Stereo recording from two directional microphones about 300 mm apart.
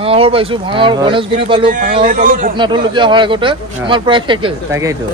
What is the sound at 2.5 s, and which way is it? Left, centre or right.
Speech, centre.